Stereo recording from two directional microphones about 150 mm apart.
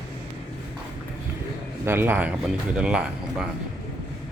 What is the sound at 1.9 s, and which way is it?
Speech, 15° right (ahead or behind).